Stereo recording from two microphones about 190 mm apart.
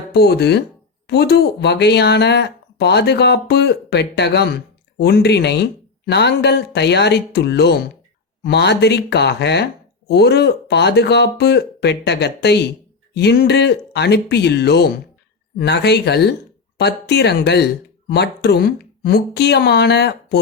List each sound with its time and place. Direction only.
0.1 s speech: 60° left (ahead or behind)